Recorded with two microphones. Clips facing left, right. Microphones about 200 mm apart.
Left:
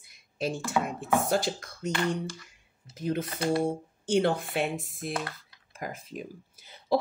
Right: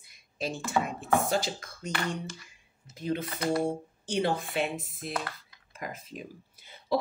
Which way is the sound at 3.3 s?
30° left (ahead or behind).